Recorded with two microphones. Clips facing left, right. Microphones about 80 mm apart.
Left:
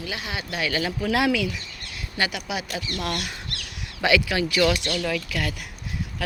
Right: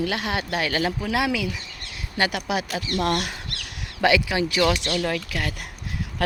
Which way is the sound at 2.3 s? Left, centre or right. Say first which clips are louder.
Right 4 dB; right.